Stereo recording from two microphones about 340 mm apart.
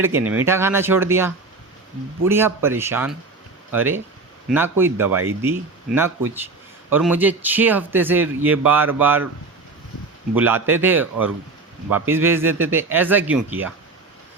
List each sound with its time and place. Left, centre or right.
0.0 s a man's voice: centre
10.3 s a man's voice: centre